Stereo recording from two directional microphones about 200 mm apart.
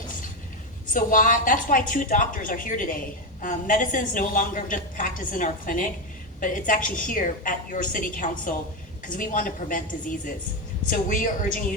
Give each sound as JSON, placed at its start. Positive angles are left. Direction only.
{"t": 0.9, "sound": "a woman's voice", "side_deg": 40}